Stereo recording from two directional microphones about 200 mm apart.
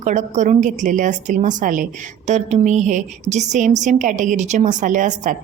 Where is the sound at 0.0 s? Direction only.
40° right (ahead or behind).